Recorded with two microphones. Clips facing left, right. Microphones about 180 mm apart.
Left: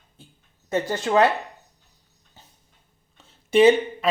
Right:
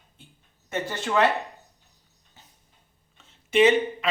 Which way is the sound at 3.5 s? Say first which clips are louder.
Left 3 dB; 35° left (ahead or behind).